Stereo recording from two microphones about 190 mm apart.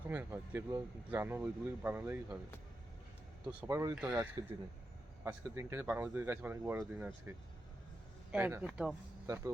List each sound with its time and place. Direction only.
0.0 s speech: 10° right (ahead or behind)
3.4 s speech: 10° right (ahead or behind)
3.9 s speech: 5° right (ahead or behind)
5.2 s speech: 15° right (ahead or behind)
9.2 s speech: 15° right (ahead or behind)